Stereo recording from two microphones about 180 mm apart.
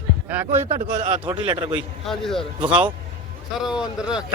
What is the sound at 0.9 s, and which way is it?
Speech, 45° right (ahead or behind).